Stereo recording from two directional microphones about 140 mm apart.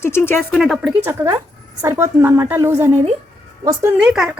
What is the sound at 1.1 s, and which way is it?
A woman's voice, 25° right (ahead or behind).